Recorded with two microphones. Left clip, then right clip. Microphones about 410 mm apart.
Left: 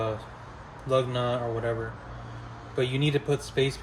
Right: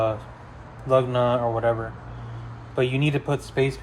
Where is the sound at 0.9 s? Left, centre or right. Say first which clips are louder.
Right 6 dB; centre.